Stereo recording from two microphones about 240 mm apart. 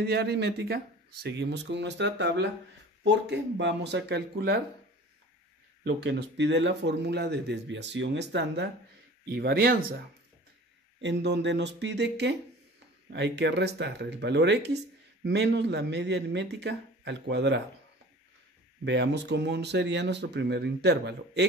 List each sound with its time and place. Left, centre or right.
0.0 s a man's voice: right
5.9 s a man's voice: right
11.0 s a man's voice: right
18.9 s a man's voice: right